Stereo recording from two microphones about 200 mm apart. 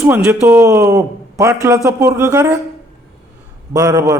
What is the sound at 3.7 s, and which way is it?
Speech, 15° right (ahead or behind).